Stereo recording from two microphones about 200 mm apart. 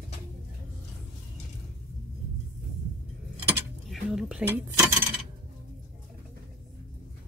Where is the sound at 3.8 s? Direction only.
Centre (ahead or behind).